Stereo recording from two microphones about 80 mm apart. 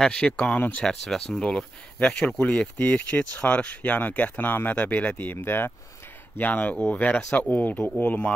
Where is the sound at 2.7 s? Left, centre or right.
Left.